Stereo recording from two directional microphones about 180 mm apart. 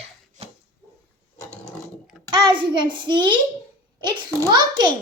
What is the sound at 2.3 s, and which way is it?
A child's voice, 25° right (ahead or behind).